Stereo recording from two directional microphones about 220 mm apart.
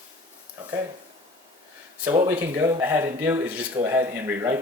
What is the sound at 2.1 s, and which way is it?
Speech, 15° right (ahead or behind).